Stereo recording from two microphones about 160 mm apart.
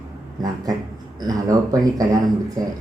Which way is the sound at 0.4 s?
25° right (ahead or behind).